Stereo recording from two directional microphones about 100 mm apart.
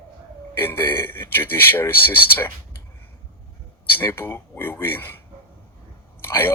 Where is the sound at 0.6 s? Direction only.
20° left (ahead or behind).